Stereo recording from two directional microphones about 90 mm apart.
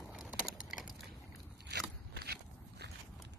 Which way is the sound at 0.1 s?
10° right (ahead or behind).